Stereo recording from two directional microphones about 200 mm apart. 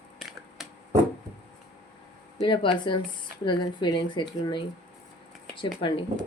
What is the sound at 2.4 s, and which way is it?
Speech, 25° left (ahead or behind).